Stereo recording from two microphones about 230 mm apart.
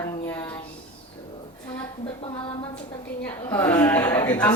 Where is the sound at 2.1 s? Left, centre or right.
Left.